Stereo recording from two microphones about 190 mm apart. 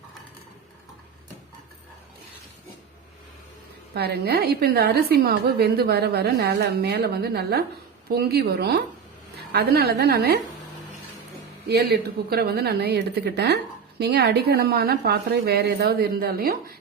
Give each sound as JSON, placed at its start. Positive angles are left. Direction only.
{"t": 3.9, "sound": "a woman's voice", "side_deg": -60}
{"t": 11.7, "sound": "a woman's voice", "side_deg": -55}